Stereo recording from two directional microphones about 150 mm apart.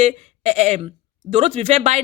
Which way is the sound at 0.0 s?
50° right (ahead or behind).